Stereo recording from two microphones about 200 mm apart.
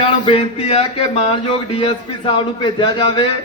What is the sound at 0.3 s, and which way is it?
Speech, 30° left (ahead or behind).